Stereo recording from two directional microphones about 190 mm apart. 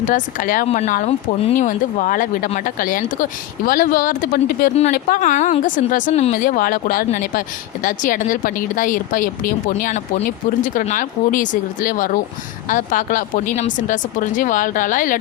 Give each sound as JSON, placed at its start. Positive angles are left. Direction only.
{"t": 0.0, "sound": "speech", "side_deg": 45}